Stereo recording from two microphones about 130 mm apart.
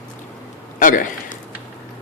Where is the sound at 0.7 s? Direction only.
90° left.